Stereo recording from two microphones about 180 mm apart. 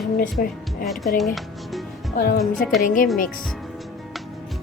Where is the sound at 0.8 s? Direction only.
Centre (ahead or behind).